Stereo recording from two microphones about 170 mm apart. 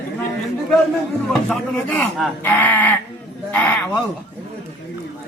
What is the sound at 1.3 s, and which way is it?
A man's voice, 5° left (ahead or behind).